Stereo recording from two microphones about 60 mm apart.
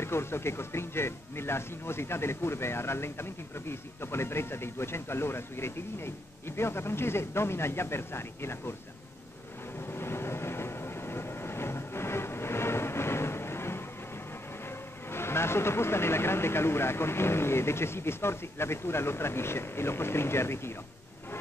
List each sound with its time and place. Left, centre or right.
0.0 s speech: left
9.8 s train: left
14.6 s vehicle: left